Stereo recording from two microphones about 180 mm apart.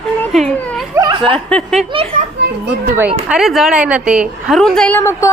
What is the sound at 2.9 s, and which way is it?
A woman's voice, 10° right (ahead or behind).